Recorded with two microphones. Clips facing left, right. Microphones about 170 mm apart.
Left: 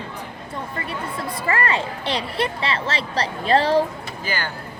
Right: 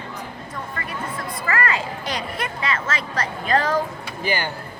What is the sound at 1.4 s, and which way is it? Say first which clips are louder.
Speech: left 1 dB; 30° left (ahead or behind).